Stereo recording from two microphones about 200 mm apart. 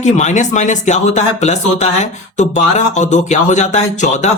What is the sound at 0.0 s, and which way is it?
Speech, 35° left (ahead or behind).